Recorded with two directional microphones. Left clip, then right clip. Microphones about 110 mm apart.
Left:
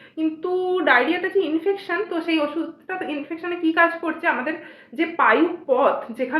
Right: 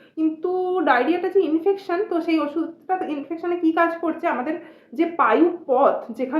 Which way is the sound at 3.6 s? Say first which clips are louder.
Left 2 dB; 35° right (ahead or behind).